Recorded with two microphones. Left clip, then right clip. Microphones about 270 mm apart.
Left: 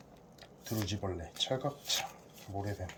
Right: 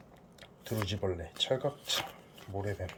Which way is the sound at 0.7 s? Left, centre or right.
Centre.